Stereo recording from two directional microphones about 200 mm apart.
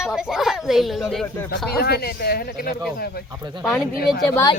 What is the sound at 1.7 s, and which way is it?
Speech, 50° left (ahead or behind).